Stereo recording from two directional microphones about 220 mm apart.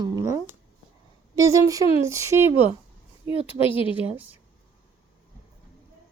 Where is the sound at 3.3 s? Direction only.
25° left (ahead or behind).